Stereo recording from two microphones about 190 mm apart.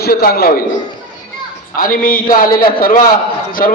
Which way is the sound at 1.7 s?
45° left (ahead or behind).